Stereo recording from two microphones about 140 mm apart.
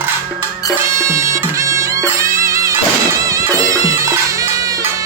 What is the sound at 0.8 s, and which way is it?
Music, 20° right (ahead or behind).